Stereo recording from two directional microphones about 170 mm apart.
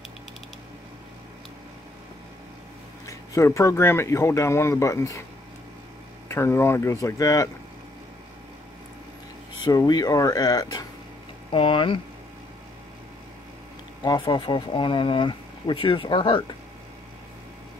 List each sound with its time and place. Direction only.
3.1 s speech: 15° left (ahead or behind)
6.2 s speech: 15° left (ahead or behind)
9.6 s speech: 25° left (ahead or behind)
14.0 s speech: 25° left (ahead or behind)